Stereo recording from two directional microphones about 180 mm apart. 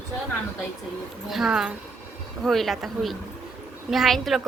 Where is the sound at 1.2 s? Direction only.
Centre (ahead or behind).